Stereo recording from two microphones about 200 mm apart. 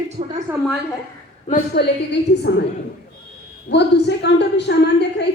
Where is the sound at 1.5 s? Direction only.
55° left (ahead or behind).